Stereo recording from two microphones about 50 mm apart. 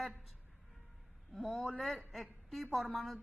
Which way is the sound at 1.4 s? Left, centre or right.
Centre.